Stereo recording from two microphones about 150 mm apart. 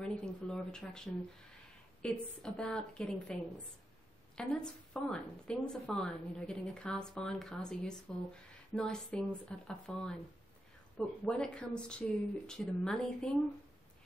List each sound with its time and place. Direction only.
0.0 s speech: 5° left (ahead or behind)
4.4 s a woman's voice: 5° left (ahead or behind)